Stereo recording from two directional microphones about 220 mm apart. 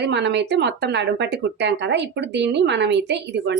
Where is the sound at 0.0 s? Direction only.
50° right (ahead or behind).